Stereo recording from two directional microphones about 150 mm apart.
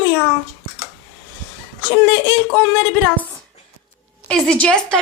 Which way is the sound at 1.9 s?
10° left (ahead or behind).